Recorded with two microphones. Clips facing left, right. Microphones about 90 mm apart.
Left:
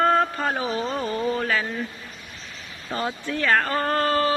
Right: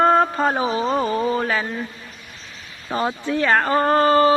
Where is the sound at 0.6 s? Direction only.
15° right (ahead or behind).